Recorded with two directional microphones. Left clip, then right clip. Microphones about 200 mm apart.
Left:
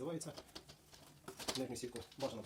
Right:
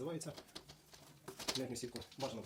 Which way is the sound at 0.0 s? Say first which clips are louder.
Even; 15° right (ahead or behind).